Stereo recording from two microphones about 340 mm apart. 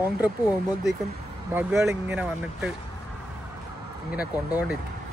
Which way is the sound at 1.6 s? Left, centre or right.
Centre.